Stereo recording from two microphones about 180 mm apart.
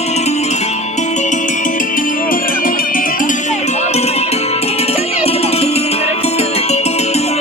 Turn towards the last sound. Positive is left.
turn(degrees=35)  # may be behind; listen again after turning